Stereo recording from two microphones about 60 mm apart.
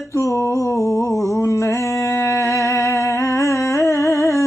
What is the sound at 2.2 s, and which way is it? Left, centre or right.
Humming, left.